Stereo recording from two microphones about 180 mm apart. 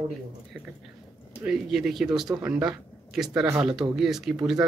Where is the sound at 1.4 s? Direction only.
5° right (ahead or behind).